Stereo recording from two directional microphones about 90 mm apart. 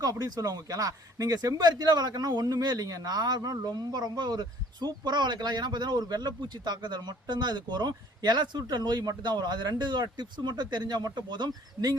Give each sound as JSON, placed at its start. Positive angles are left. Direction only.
{"t": 0.0, "sound": "speech", "side_deg": -50}